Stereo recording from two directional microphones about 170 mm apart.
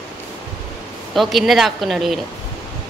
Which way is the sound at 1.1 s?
Centre (ahead or behind).